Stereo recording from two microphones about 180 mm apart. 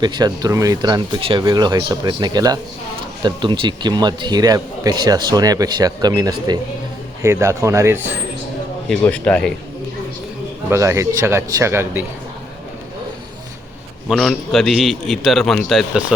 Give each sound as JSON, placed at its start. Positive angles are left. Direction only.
{"t": 0.0, "sound": "a man's voice", "side_deg": -25}
{"t": 8.9, "sound": "speech", "side_deg": 5}
{"t": 10.7, "sound": "a man's voice", "side_deg": -15}
{"t": 14.1, "sound": "a man's voice", "side_deg": 0}